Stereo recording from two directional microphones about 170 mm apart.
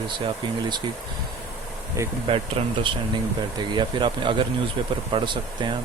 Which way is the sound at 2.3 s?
30° right (ahead or behind).